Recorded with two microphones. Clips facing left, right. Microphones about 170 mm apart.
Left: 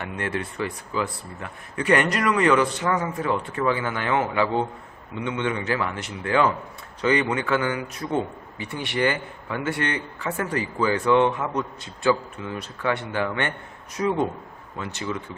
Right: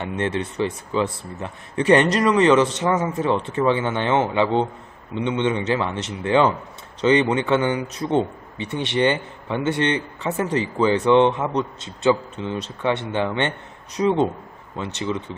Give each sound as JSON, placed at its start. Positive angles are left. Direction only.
{"t": 0.0, "sound": "a man's voice", "side_deg": -25}